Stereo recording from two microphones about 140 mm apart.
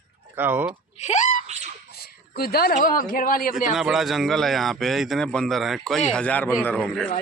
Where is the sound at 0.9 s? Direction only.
55° left (ahead or behind).